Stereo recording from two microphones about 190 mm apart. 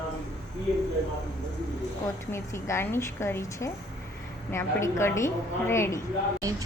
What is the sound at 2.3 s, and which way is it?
A woman's voice, 15° left (ahead or behind).